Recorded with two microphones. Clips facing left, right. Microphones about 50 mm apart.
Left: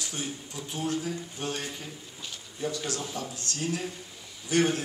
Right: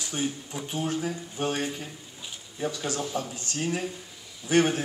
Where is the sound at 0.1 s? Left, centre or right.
Right.